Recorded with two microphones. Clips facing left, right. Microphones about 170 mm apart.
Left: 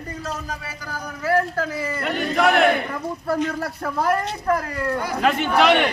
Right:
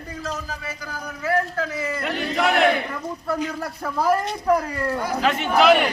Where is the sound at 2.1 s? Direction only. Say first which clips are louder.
Left 4 dB; 50° left (ahead or behind).